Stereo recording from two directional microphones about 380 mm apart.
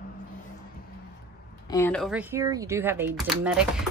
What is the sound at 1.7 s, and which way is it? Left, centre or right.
Speech, centre.